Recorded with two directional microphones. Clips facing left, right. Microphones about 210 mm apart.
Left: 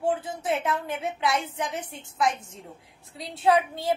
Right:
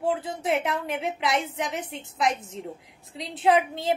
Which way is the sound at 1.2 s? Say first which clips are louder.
Even; 90° right.